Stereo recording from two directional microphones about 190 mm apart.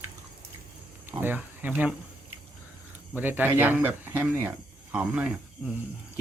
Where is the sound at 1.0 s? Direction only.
10° right (ahead or behind).